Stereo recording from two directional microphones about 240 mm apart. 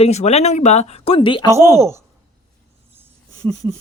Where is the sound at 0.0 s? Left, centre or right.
Left.